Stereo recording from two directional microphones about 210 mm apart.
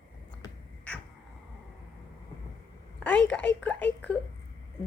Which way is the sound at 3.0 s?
5° left (ahead or behind).